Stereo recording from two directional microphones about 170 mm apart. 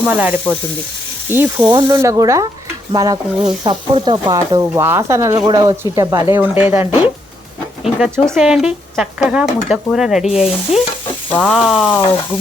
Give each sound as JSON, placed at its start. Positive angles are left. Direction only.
{"t": 0.0, "sound": "speech", "side_deg": -10}
{"t": 7.9, "sound": "speech", "side_deg": -5}
{"t": 11.3, "sound": "frying", "side_deg": 10}
{"t": 11.5, "sound": "speech", "side_deg": -5}